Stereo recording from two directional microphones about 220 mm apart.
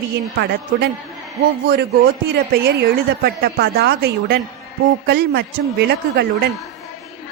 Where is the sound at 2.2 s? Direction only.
45° right (ahead or behind).